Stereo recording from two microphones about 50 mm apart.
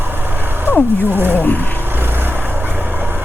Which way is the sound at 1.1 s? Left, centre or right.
Right.